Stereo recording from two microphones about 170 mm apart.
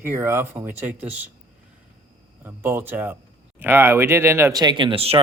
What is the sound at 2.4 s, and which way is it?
Speech, 10° right (ahead or behind).